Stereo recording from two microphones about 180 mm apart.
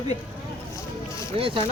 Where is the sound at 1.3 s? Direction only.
30° right (ahead or behind).